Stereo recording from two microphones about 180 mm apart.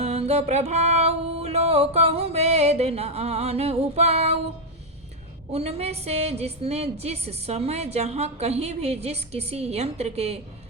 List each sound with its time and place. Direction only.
0.0 s music: 35° right (ahead or behind)
5.5 s a woman's voice: 35° right (ahead or behind)